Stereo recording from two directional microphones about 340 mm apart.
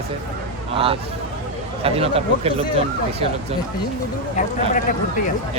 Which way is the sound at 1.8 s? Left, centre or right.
Centre.